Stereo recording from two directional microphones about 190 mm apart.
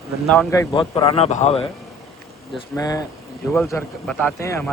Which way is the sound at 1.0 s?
30° left (ahead or behind).